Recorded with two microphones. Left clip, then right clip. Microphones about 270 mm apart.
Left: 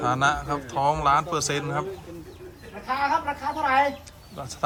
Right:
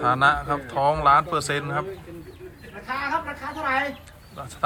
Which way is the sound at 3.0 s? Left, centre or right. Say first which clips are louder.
Left 3 dB; left.